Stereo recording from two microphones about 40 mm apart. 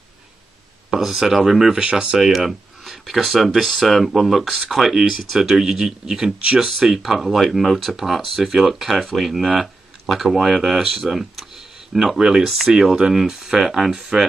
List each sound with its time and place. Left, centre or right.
0.9 s speech: centre
1.8 s speech: right
2.1 s speech: centre